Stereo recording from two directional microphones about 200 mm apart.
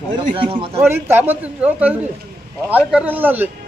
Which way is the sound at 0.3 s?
25° right (ahead or behind).